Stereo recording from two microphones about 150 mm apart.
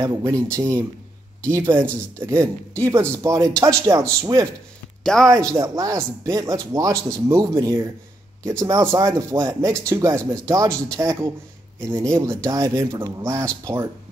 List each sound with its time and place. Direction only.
0.0 s speech: 20° right (ahead or behind)
5.1 s speech: 5° left (ahead or behind)
5.5 s speech: 25° right (ahead or behind)